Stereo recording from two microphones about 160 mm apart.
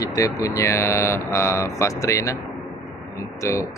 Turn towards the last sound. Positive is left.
turn(degrees=20)  # may be behind; listen again after turning